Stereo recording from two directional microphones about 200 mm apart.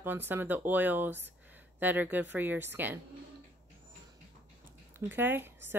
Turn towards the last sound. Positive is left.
turn(degrees=-10)  # may be behind; listen again after turning